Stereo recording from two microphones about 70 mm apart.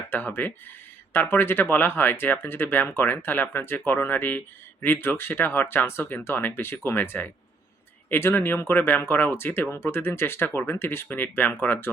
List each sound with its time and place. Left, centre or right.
0.1 s speech: left